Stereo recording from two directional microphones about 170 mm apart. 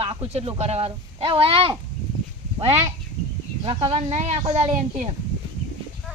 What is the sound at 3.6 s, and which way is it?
Speech, 30° right (ahead or behind).